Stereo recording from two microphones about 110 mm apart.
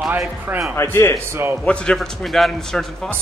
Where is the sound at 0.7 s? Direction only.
20° left (ahead or behind).